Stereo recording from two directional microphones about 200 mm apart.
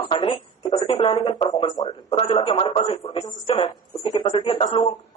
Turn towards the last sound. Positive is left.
turn(degrees=25)  # may be behind; listen again after turning